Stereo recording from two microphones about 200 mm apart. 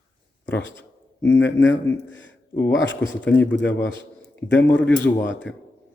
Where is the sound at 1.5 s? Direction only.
65° left (ahead or behind).